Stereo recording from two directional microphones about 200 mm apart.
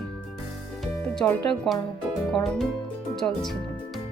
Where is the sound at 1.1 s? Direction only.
5° left (ahead or behind).